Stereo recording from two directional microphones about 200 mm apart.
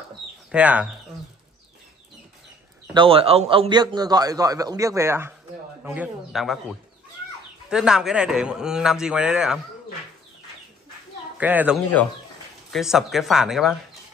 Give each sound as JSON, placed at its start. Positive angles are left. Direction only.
{"t": 0.5, "sound": "speech", "side_deg": -5}
{"t": 2.9, "sound": "a man's voice", "side_deg": -25}
{"t": 11.3, "sound": "a man's voice", "side_deg": -10}